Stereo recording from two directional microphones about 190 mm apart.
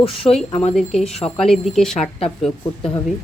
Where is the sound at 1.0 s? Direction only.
35° left (ahead or behind).